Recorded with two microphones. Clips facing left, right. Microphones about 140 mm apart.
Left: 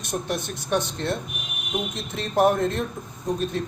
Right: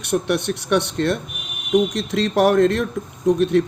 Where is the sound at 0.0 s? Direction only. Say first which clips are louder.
Right 8 dB; 65° right (ahead or behind).